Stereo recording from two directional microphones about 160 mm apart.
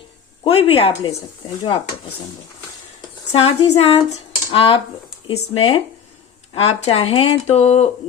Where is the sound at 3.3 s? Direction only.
35° left (ahead or behind).